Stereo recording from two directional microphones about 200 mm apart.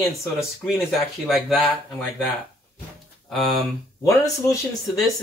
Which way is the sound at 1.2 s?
Centre (ahead or behind).